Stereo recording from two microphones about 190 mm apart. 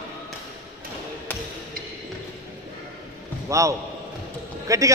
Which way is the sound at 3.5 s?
15° right (ahead or behind).